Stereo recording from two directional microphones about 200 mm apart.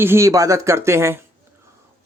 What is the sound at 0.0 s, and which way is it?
A man's voice, 15° right (ahead or behind).